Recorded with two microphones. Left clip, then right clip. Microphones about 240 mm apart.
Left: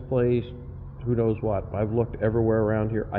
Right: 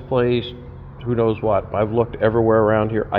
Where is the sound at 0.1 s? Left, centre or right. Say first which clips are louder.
Right 5 dB; centre.